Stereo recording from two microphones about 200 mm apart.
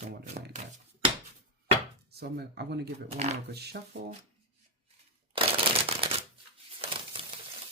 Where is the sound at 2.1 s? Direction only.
55° right (ahead or behind).